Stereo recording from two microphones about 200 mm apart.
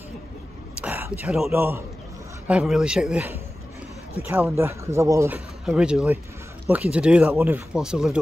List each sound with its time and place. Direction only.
0.7 s speech: 10° right (ahead or behind)